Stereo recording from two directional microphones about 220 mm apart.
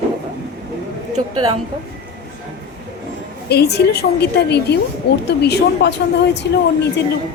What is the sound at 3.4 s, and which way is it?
A woman's voice, 50° left (ahead or behind).